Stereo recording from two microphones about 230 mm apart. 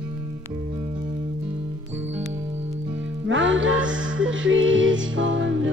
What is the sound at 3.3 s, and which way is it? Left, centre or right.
Music, right.